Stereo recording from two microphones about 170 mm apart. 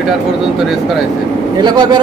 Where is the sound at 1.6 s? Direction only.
25° right (ahead or behind).